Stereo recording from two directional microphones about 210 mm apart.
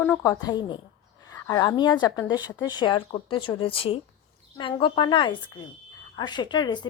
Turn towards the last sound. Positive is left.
turn(degrees=20)  # may be behind; listen again after turning